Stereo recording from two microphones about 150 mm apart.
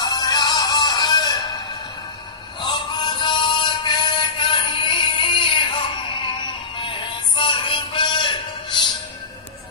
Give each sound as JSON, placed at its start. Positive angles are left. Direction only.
{"t": 0.0, "sound": "music", "side_deg": 25}
{"t": 2.6, "sound": "music", "side_deg": 30}